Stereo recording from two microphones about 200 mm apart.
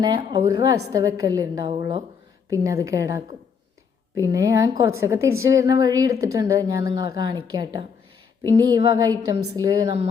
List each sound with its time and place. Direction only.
0.0 s a woman's voice: 20° right (ahead or behind)